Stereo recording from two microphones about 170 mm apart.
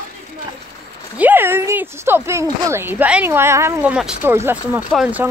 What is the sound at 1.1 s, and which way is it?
Speech, 10° right (ahead or behind).